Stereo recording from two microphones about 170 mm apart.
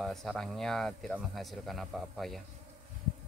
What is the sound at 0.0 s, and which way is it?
A man's voice, centre (ahead or behind).